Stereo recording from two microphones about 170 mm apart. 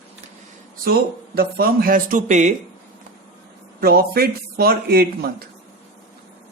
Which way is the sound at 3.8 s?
65° right (ahead or behind).